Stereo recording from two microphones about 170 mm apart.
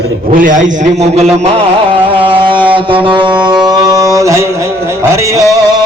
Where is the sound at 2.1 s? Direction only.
30° right (ahead or behind).